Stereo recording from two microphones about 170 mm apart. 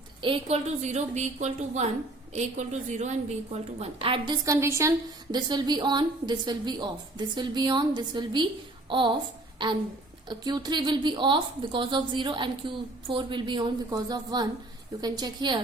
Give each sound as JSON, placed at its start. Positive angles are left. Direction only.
{"t": 0.2, "sound": "a woman's voice", "side_deg": -35}
{"t": 4.4, "sound": "a woman's voice", "side_deg": -15}
{"t": 10.2, "sound": "a woman's voice", "side_deg": -25}